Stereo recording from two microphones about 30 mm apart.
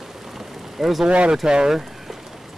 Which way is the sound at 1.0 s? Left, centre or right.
Right.